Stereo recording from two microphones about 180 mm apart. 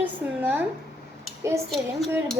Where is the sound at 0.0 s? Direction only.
10° right (ahead or behind).